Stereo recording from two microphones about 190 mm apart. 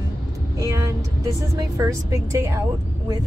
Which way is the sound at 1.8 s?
15° right (ahead or behind).